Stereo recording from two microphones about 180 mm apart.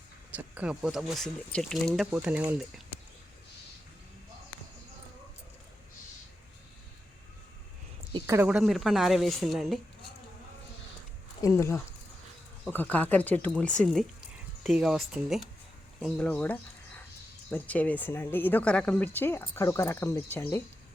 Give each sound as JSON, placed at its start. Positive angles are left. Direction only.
{"t": 0.3, "sound": "speech", "side_deg": -10}
{"t": 8.3, "sound": "speech", "side_deg": -5}
{"t": 11.4, "sound": "speech", "side_deg": 15}